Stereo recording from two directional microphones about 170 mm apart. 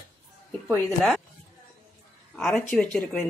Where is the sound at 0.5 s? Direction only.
10° left (ahead or behind).